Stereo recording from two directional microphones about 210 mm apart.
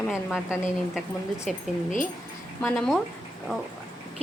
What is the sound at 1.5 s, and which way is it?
A woman's voice, centre (ahead or behind).